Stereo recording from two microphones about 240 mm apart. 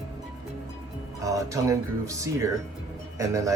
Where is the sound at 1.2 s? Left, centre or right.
Centre.